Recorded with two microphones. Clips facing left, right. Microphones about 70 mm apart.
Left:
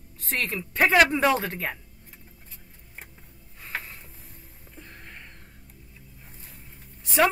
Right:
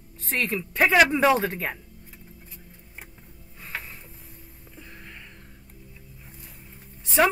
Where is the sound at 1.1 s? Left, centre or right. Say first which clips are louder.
Right 2 dB; centre.